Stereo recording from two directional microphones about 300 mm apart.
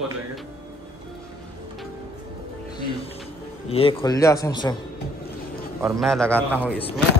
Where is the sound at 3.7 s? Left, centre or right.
Centre.